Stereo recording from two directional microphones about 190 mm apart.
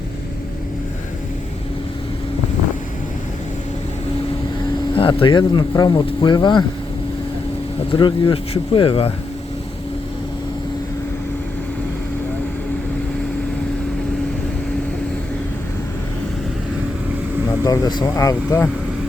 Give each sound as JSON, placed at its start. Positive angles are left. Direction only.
{"t": 4.9, "sound": "speech", "side_deg": 30}
{"t": 7.9, "sound": "speech", "side_deg": 25}
{"t": 17.7, "sound": "speech", "side_deg": 20}